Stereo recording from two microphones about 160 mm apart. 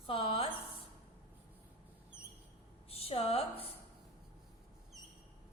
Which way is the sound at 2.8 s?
35° left (ahead or behind).